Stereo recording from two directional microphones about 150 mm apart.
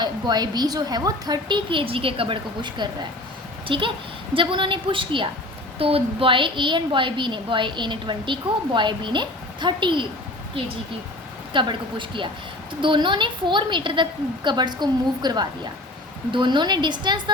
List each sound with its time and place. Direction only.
0.0 s a woman's voice: 30° right (ahead or behind)
11.5 s a woman's voice: 35° right (ahead or behind)